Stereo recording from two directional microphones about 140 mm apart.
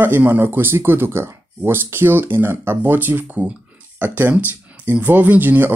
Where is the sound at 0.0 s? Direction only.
15° right (ahead or behind).